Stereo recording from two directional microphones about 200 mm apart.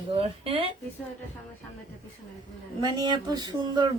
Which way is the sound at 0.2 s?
25° right (ahead or behind).